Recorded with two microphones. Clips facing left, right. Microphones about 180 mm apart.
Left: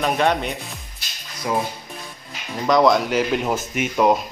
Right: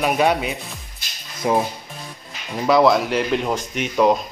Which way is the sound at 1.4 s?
25° right (ahead or behind).